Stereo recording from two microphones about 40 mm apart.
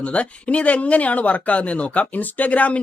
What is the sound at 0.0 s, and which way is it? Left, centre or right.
A woman's voice, left.